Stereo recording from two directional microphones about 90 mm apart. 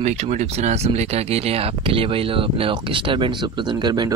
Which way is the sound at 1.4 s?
90° right.